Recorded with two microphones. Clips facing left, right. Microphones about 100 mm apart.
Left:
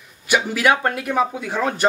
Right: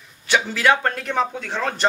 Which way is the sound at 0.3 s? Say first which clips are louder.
Left 1 dB; 10° left (ahead or behind).